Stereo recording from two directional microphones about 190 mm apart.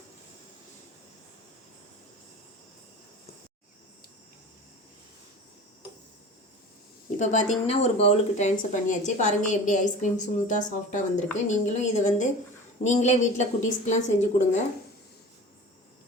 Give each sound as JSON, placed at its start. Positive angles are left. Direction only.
{"t": 7.2, "sound": "speech", "side_deg": 40}